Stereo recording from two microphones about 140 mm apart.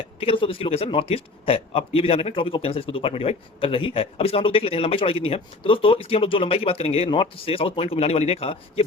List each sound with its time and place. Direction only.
0.2 s a man's voice: 40° left (ahead or behind)